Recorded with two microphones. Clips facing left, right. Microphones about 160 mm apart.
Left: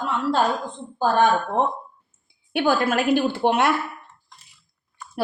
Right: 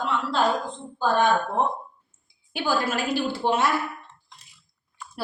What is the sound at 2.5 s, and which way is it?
A woman's voice, 60° left (ahead or behind).